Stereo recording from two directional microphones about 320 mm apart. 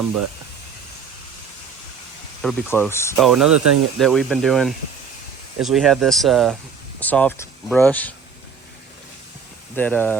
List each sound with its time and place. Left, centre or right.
2.4 s speech: centre
3.5 s speech: right
3.9 s speech: centre
9.7 s speech: centre